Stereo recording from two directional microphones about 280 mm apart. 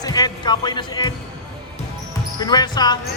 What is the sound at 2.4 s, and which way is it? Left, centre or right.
Speech, centre.